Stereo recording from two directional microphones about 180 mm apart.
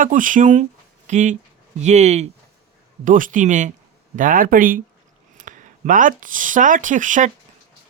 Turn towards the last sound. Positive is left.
turn(degrees=-45)  # may be behind; listen again after turning